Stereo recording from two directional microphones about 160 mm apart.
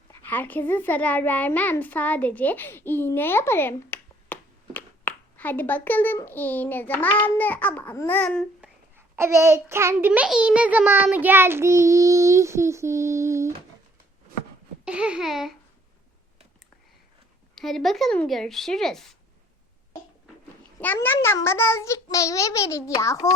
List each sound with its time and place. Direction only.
0.1 s a child's voice: 10° left (ahead or behind)
8.6 s a child's voice: 15° right (ahead or behind)
10.1 s child singing: 5° right (ahead or behind)
14.8 s speech: 5° right (ahead or behind)
17.5 s speech: centre (ahead or behind)
20.8 s a child's voice: 10° left (ahead or behind)